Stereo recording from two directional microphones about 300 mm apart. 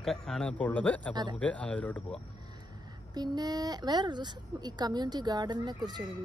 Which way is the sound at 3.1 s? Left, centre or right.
Centre.